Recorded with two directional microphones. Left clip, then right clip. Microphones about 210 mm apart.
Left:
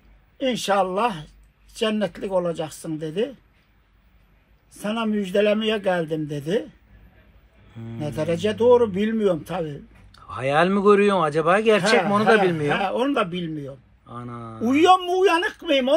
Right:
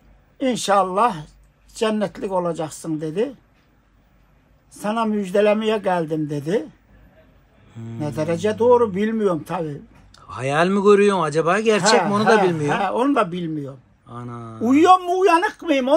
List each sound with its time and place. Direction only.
0.4 s speech: 20° right (ahead or behind)
4.7 s speech: 15° right (ahead or behind)
7.7 s speech: 15° right (ahead or behind)